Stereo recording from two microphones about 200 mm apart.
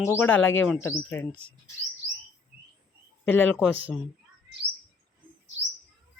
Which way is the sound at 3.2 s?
10° left (ahead or behind).